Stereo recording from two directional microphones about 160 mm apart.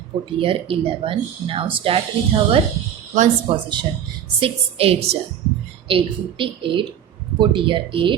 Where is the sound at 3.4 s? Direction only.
30° right (ahead or behind).